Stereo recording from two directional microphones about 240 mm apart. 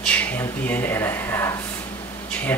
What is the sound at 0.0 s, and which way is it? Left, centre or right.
Speech, centre.